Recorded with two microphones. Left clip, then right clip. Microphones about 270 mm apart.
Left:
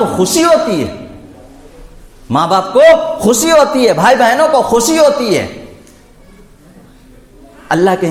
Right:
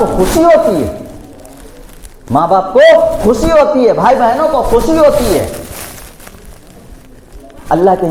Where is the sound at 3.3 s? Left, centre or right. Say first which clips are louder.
Left 2 dB; left.